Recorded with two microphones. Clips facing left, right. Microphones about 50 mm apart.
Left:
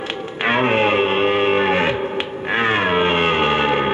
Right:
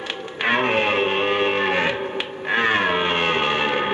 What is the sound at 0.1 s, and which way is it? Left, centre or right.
Music, centre.